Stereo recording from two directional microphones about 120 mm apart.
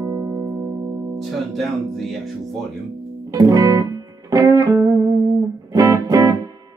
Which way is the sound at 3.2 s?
30° right (ahead or behind).